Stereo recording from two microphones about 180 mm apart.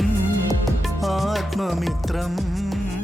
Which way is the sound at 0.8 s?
Centre (ahead or behind).